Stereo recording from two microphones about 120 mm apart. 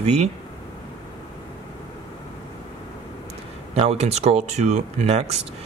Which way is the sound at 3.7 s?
60° right (ahead or behind).